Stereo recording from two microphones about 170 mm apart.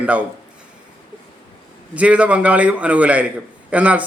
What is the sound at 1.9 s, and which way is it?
Speech, 5° right (ahead or behind).